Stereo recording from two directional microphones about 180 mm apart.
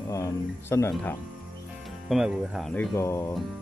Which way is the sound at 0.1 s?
15° left (ahead or behind).